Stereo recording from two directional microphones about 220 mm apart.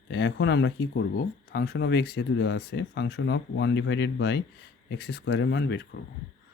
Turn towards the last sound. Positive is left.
turn(degrees=50)  # may be behind; listen again after turning